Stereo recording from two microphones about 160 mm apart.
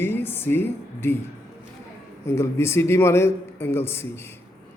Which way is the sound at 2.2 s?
15° left (ahead or behind).